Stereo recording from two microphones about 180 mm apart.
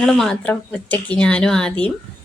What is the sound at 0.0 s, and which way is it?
A woman's voice, 5° left (ahead or behind).